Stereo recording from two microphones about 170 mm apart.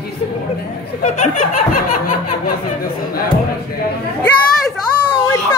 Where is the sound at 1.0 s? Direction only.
50° left (ahead or behind).